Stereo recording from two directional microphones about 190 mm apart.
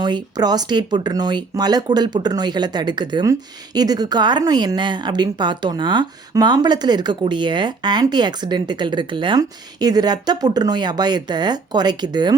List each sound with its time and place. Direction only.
0.0 s speech: 20° right (ahead or behind)